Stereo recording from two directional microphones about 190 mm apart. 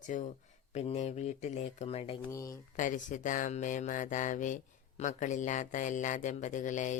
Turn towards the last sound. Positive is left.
turn(degrees=40)  # may be behind; listen again after turning